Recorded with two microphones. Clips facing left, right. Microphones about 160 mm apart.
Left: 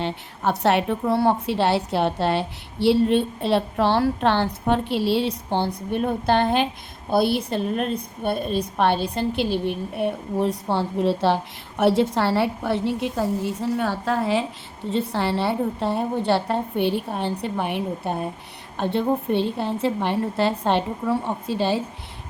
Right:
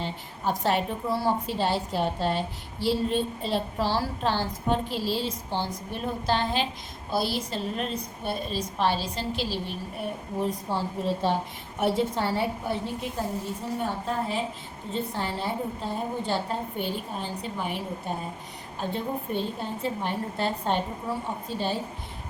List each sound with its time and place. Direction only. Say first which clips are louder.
0.0 s a woman's voice: left 5 dB; 70° left (ahead or behind)
11.8 s a woman's voice: left 6 dB; 90° left; by 18.3 s 65° left (ahead or behind)
18.8 s a woman's voice: left 8 dB; 75° left (ahead or behind)